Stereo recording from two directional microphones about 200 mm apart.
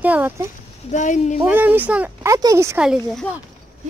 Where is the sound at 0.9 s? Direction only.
35° left (ahead or behind).